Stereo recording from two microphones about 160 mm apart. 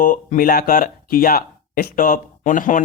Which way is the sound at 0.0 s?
55° left (ahead or behind).